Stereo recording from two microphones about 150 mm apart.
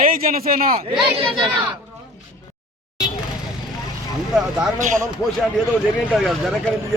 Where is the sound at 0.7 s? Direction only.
40° right (ahead or behind).